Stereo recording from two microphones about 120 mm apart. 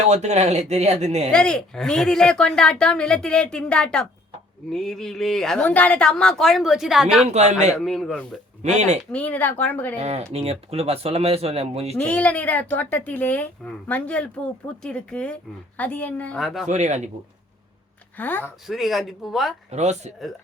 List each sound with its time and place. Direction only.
0.1 s speech: 70° right (ahead or behind)
1.3 s speech: 5° left (ahead or behind)
7.3 s speech: 70° right (ahead or behind)
7.8 s speech: centre (ahead or behind)
8.6 s speech: 70° right (ahead or behind)
9.1 s a woman's voice: 15° left (ahead or behind)
9.9 s speech: 65° right (ahead or behind)
11.9 s a woman's voice: 10° left (ahead or behind)
16.4 s speech: centre (ahead or behind)
16.6 s speech: 80° right
18.2 s a woman's voice: 15° left (ahead or behind)
18.7 s speech: centre (ahead or behind)
19.7 s speech: 70° right (ahead or behind)